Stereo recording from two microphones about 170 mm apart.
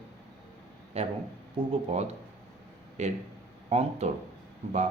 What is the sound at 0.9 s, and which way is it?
Speech, 35° right (ahead or behind).